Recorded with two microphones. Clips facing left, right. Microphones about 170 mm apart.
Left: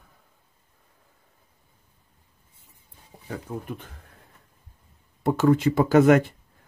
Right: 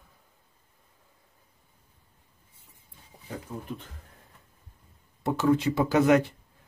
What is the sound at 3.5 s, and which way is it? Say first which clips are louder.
Speech: left 5 dB; 55° left (ahead or behind).